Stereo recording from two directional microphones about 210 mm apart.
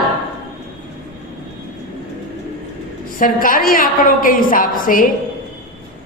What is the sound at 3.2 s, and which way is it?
A woman's voice, 40° left (ahead or behind).